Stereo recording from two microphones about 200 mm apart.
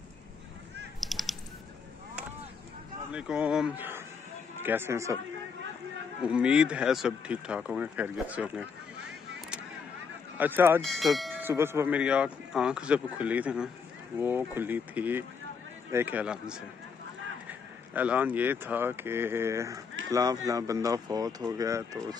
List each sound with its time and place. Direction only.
1.0 s a sound: centre (ahead or behind)
3.1 s speech: 5° right (ahead or behind)
6.2 s speech: 5° right (ahead or behind)
10.3 s speech: 10° right (ahead or behind)
10.8 s speech: centre (ahead or behind)
11.4 s speech: 10° right (ahead or behind)